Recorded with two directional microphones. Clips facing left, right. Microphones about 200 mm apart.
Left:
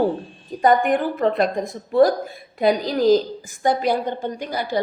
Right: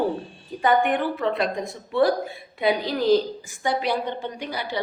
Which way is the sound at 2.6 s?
40° left (ahead or behind).